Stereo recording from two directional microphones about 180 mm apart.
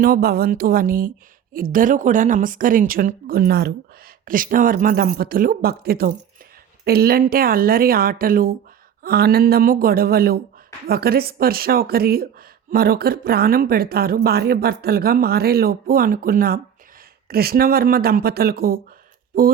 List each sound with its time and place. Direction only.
0.0 s speech: 55° right (ahead or behind)